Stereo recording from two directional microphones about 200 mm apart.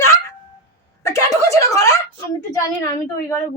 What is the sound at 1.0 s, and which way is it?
Speech, 15° left (ahead or behind).